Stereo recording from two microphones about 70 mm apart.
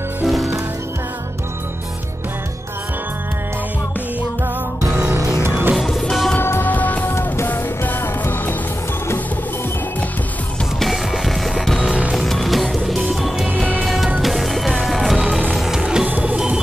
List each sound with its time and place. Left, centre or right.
0.2 s music: centre
5.4 s music: right
5.8 s music: centre
6.3 s music: left
6.6 s music: left
10.8 s music: centre
15.1 s music: centre
16.1 s music: right
16.3 s music: centre